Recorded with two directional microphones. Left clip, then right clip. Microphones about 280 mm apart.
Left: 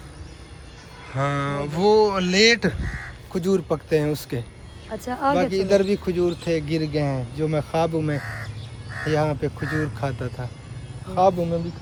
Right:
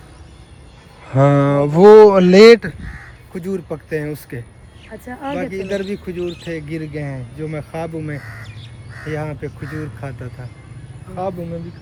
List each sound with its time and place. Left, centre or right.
1.1 s speech: centre
2.6 s speech: left
3.3 s speech: centre
8.2 s speech: left
8.9 s crow: left
9.1 s speech: centre